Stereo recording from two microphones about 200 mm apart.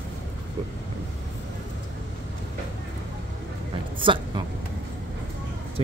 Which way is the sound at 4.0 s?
25° right (ahead or behind).